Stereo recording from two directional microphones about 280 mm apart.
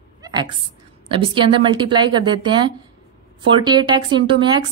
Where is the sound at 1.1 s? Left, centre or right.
Centre.